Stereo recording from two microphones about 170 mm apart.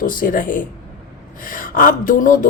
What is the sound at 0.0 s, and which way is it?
Speech, 55° left (ahead or behind).